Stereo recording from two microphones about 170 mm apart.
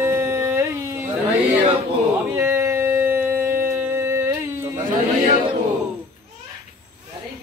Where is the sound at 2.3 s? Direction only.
15° right (ahead or behind).